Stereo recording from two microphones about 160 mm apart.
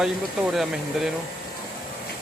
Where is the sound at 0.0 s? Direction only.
Centre (ahead or behind).